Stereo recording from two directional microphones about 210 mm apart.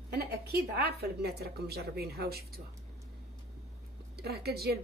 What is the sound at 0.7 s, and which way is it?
A woman's voice, 50° right (ahead or behind).